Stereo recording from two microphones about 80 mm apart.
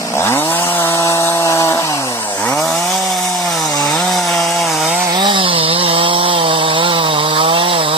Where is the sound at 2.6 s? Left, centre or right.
Centre.